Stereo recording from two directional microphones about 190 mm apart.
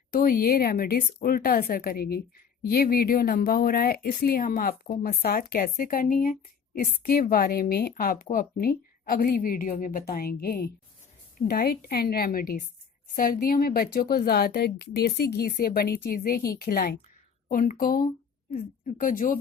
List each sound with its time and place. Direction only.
0.1 s speech: 50° left (ahead or behind)